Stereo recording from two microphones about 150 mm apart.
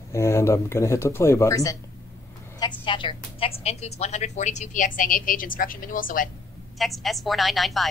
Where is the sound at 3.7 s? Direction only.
45° left (ahead or behind); by 6.3 s 65° left (ahead or behind).